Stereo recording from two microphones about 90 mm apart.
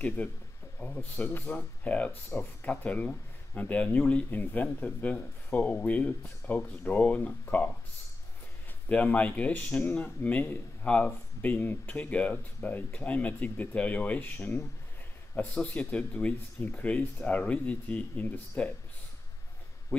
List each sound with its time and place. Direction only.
0.0 s a man's voice: 15° left (ahead or behind)
1.1 s a man's voice: 25° left (ahead or behind)
8.8 s a man's voice: 15° left (ahead or behind)
19.9 s speech: 20° left (ahead or behind)